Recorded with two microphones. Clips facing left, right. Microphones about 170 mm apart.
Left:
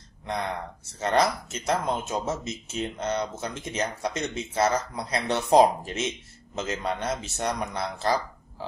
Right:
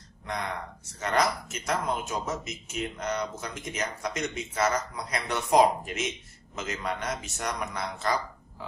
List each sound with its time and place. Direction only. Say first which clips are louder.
0.9 s speech: left 3 dB; 30° left (ahead or behind)